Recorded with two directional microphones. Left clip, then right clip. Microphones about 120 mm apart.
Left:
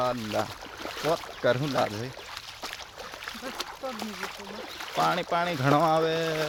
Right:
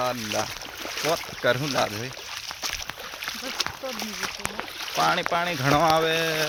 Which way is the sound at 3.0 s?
20° right (ahead or behind).